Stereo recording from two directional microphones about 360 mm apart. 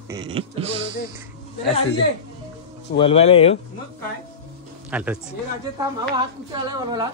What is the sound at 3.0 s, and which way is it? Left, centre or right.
Speech, centre.